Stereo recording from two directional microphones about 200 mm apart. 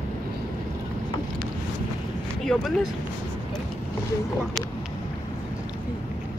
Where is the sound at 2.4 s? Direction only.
Centre (ahead or behind).